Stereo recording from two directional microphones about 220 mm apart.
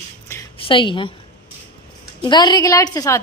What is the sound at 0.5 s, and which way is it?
Speech, 25° left (ahead or behind).